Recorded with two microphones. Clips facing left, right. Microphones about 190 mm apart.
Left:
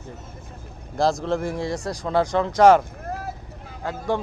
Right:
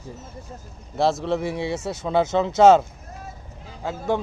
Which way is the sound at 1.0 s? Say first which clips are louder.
Even; 5° right (ahead or behind).